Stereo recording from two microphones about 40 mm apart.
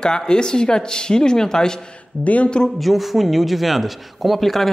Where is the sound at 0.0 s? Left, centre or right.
Centre.